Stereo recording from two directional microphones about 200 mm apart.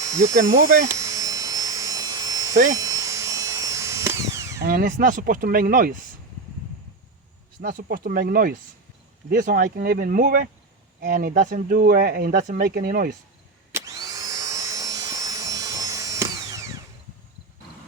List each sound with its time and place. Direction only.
0.0 s speech: 15° right (ahead or behind)
0.9 s a sound: 15° right (ahead or behind)
2.7 s drill: 15° right (ahead or behind)
4.6 s speech: 45° right (ahead or behind)
7.6 s speech: 45° right (ahead or behind)
13.7 s vacuum cleaner: 15° right (ahead or behind)